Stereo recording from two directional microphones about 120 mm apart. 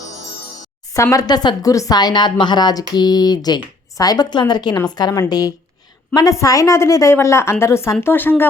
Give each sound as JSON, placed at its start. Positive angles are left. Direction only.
{"t": 1.1, "sound": "a woman's voice", "side_deg": 35}